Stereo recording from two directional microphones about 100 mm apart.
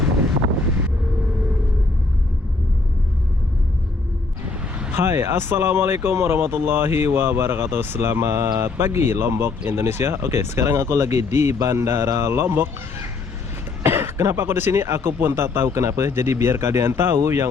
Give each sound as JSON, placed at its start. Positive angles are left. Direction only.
{"t": 4.9, "sound": "speech", "side_deg": -25}